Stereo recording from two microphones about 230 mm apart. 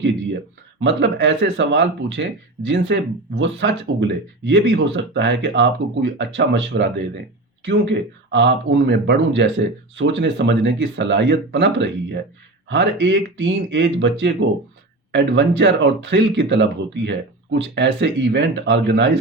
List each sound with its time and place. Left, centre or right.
0.9 s a man's voice: right